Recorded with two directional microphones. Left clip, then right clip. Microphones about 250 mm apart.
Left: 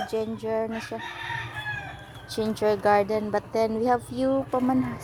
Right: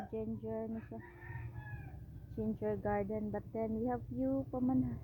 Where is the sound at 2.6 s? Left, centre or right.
Centre.